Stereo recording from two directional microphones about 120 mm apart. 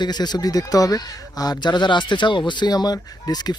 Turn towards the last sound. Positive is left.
turn(degrees=35)  # may be behind; listen again after turning